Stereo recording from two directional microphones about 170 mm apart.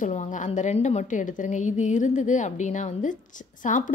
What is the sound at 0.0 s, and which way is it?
A woman's voice, 45° left (ahead or behind).